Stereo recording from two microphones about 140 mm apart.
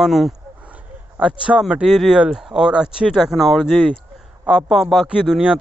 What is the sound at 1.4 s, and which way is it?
Speech, 10° right (ahead or behind).